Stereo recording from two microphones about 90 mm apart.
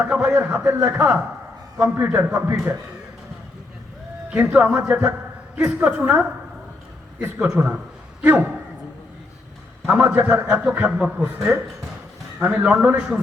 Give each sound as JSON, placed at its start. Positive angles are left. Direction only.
{"t": 0.0, "sound": "a man's voice", "side_deg": -15}
{"t": 4.4, "sound": "a man's voice", "side_deg": -20}
{"t": 7.3, "sound": "a man's voice", "side_deg": -10}
{"t": 9.8, "sound": "a man's voice", "side_deg": -15}